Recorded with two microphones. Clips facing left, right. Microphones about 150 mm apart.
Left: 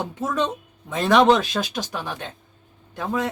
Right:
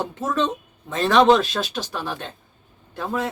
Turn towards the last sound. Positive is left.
turn(degrees=15)  # may be behind; listen again after turning